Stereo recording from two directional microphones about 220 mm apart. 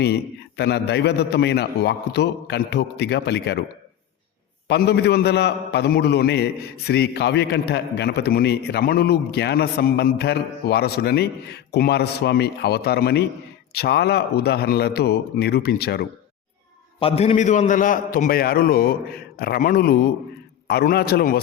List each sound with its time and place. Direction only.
0.0 s a man's voice: 50° left (ahead or behind)
4.7 s a man's voice: 50° left (ahead or behind)
17.0 s a man's voice: 25° left (ahead or behind); by 21.4 s 45° left (ahead or behind)